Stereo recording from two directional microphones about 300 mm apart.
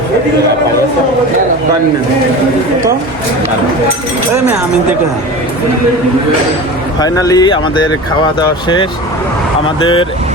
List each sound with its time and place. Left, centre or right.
7.0 s speech: centre
9.8 s speech: centre